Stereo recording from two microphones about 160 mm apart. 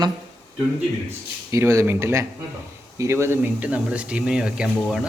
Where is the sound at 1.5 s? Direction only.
20° right (ahead or behind).